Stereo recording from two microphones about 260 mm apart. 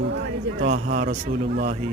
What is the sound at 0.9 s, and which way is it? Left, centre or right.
Speech, right.